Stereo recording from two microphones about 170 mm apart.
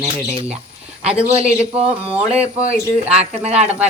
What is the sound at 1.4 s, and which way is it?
Speech, 35° right (ahead or behind).